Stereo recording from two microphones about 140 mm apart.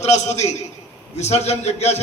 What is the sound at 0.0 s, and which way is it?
A man's voice, 55° left (ahead or behind).